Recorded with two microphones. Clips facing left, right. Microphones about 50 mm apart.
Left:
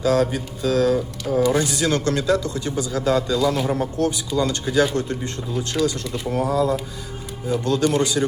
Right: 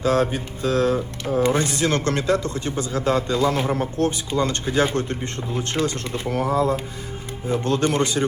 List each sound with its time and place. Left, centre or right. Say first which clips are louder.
0.0 s speech: left 1 dB; right